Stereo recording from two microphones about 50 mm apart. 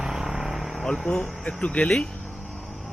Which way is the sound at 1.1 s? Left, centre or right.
Centre.